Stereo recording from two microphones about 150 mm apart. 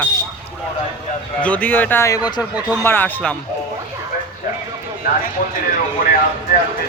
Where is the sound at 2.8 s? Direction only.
15° left (ahead or behind).